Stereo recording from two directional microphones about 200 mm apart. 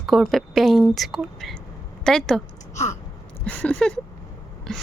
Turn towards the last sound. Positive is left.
turn(degrees=5)  # may be behind; listen again after turning